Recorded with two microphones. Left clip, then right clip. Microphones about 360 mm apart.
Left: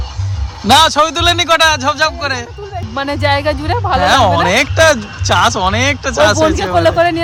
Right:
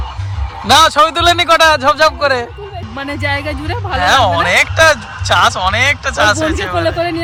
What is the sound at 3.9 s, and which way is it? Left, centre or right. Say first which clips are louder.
Speech: even; centre.